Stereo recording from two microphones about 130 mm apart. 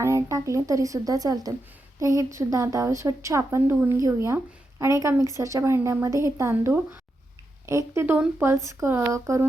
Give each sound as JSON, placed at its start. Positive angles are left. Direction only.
{"t": 0.0, "sound": "a woman's voice", "side_deg": -20}